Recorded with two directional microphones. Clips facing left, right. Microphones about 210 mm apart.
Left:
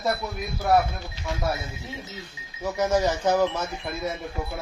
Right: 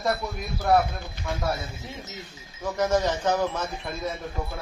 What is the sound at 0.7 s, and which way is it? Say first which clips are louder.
Speech: even; 5° left (ahead or behind).